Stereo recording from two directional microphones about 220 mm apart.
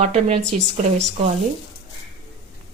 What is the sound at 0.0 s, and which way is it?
A woman's voice, 30° right (ahead or behind).